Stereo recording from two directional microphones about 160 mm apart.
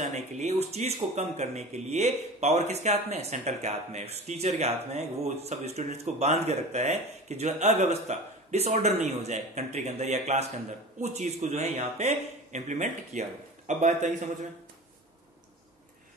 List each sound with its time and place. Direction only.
0.0 s speech: 45° right (ahead or behind)